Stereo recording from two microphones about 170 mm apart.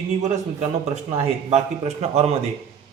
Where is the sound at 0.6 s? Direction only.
40° right (ahead or behind).